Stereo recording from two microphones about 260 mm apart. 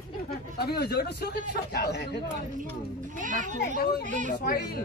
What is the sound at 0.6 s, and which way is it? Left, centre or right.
Speech, left.